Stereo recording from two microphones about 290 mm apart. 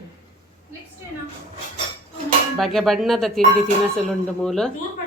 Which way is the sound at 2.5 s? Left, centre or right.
Centre.